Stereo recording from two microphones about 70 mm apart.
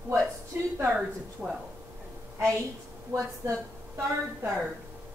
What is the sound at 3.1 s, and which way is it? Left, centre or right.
Speech, right.